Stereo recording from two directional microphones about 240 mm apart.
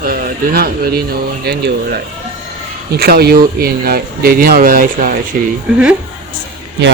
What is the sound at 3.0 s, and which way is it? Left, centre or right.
Speech, right.